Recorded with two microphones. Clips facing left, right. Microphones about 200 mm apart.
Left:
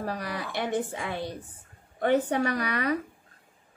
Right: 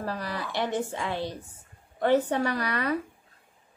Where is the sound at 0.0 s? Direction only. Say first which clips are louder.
Even; 15° left (ahead or behind).